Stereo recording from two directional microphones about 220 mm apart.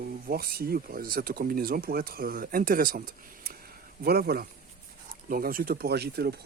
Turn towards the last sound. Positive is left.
turn(degrees=-45)  # may be behind; listen again after turning